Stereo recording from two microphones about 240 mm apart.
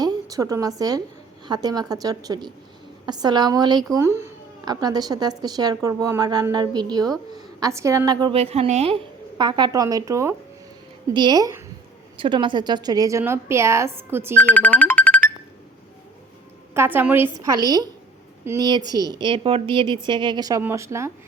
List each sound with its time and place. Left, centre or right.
0.0 s a woman's voice: centre
14.3 s speech: centre
16.7 s speech: centre